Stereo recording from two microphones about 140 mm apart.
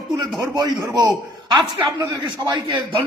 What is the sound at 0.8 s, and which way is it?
A man's voice, 30° right (ahead or behind).